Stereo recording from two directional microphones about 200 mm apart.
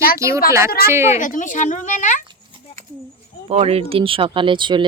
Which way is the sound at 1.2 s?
40° left (ahead or behind).